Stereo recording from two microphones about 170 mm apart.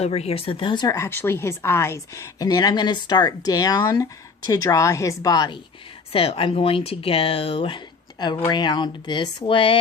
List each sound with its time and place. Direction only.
0.0 s a woman's voice: 40° left (ahead or behind)